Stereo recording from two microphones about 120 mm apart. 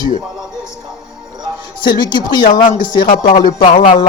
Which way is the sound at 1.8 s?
40° left (ahead or behind).